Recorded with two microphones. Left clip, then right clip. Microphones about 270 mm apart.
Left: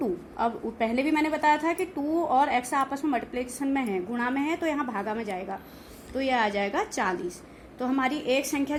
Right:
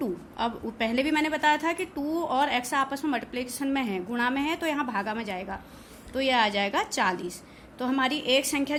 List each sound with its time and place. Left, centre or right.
0.0 s a woman's voice: centre